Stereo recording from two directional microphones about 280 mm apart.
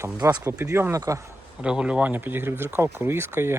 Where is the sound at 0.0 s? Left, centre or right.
Centre.